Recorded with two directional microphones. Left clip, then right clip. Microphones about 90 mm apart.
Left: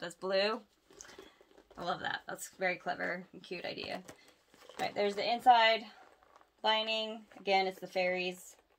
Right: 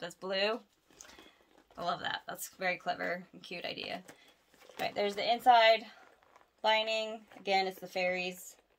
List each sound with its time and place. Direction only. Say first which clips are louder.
0.0 s speech: left 1 dB; 15° right (ahead or behind)